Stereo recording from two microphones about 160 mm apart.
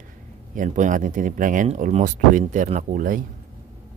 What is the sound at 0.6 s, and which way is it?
Speech, 55° right (ahead or behind).